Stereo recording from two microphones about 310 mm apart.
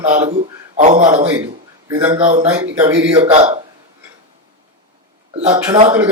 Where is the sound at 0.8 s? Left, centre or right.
Right.